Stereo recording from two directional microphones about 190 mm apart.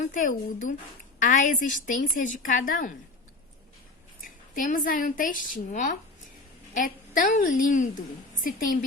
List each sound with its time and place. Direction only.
0.0 s a woman's voice: 45° left (ahead or behind)
4.5 s a woman's voice: 45° left (ahead or behind)